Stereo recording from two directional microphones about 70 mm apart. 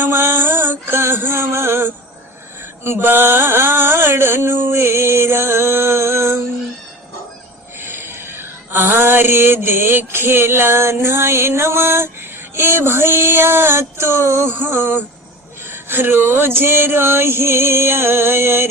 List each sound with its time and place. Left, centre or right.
0.0 s music: right
2.8 s mantra: right
7.8 s a sound: right
12.5 s mantra: right